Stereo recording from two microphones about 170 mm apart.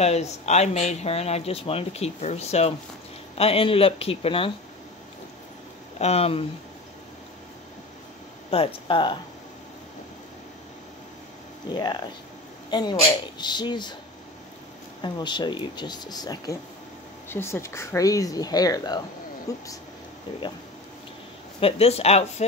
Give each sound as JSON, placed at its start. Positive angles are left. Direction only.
{"t": 0.0, "sound": "speech", "side_deg": 40}
{"t": 5.9, "sound": "speech", "side_deg": 40}
{"t": 8.5, "sound": "speech", "side_deg": 30}
{"t": 11.7, "sound": "speech", "side_deg": 25}
{"t": 15.0, "sound": "speech", "side_deg": 25}
{"t": 21.5, "sound": "speech", "side_deg": 35}